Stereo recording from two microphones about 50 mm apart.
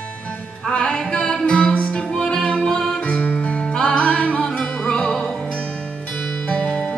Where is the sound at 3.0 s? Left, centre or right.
Left.